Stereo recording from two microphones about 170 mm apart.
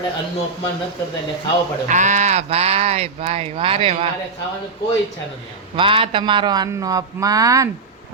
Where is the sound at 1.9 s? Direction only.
45° right (ahead or behind).